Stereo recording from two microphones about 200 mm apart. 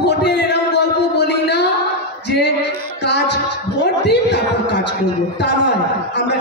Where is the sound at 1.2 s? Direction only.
60° left (ahead or behind).